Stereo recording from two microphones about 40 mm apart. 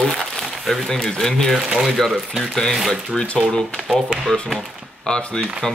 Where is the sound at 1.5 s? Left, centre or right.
Right.